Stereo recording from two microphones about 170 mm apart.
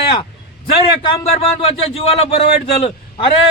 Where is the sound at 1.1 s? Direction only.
35° left (ahead or behind).